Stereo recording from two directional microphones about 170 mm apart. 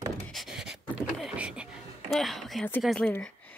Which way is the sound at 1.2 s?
5° right (ahead or behind).